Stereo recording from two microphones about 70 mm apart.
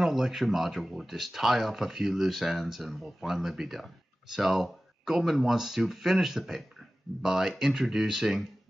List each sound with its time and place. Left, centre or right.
0.0 s speech: centre